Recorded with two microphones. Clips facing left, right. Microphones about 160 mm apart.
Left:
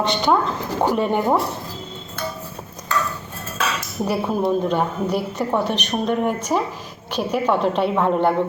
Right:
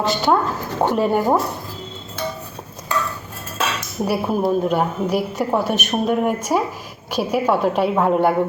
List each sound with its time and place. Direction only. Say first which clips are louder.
0.0 s a woman's voice: right 1 dB; centre (ahead or behind)
4.0 s a woman's voice: right 1 dB; 10° right (ahead or behind)